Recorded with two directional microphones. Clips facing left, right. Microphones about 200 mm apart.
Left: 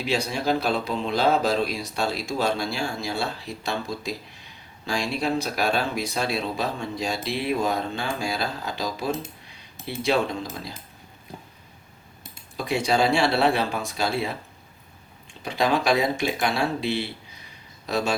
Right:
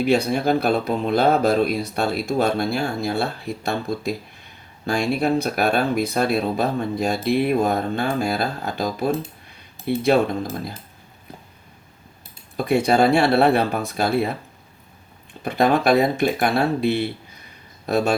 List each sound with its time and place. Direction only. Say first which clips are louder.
0.0 s speech: right 7 dB; 55° right (ahead or behind)
12.5 s speech: right 5 dB; 60° right (ahead or behind)